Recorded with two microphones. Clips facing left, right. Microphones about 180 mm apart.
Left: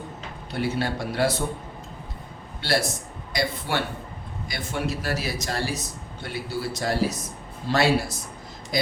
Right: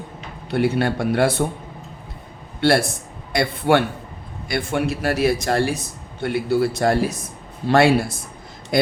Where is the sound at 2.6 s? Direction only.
55° right (ahead or behind).